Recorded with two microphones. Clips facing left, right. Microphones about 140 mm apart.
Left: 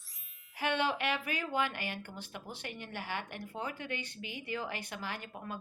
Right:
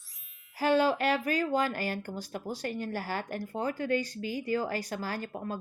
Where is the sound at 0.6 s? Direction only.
35° right (ahead or behind).